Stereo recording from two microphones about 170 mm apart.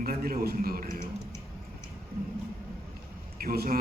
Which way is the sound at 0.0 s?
60° right (ahead or behind).